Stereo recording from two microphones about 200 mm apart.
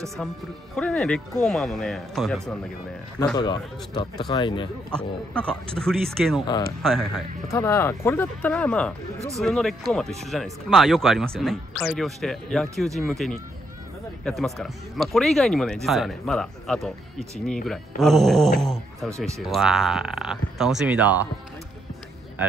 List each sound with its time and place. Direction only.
0.7 s speech: 5° left (ahead or behind)
3.3 s speech: 20° left (ahead or behind)
4.9 s speech: 5° left (ahead or behind)
7.4 s speech: 15° left (ahead or behind); by 21.3 s 5° right (ahead or behind)